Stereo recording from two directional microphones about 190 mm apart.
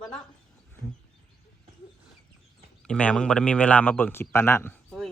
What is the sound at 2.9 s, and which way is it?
A woman's voice, 5° left (ahead or behind).